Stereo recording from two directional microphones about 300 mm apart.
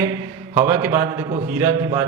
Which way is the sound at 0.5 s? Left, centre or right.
Centre.